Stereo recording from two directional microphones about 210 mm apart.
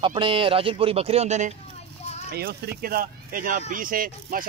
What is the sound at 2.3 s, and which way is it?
Speech, 50° right (ahead or behind).